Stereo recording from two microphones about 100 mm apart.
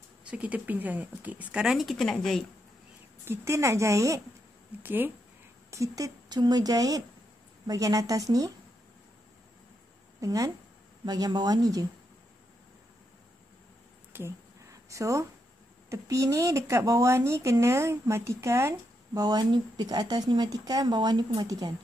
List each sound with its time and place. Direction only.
0.3 s speech: 15° right (ahead or behind); by 2.4 s 5° left (ahead or behind)
3.3 s speech: 30° right (ahead or behind)
4.8 s speech: 20° right (ahead or behind)
5.7 s speech: 35° right (ahead or behind)
10.2 s speech: 35° right (ahead or behind)
14.1 s a sound: 30° right (ahead or behind)
15.9 s speech: 30° right (ahead or behind)
19.2 s speech: 45° right (ahead or behind)